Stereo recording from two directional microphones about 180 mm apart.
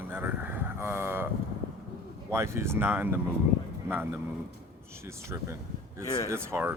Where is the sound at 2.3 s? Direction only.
15° right (ahead or behind).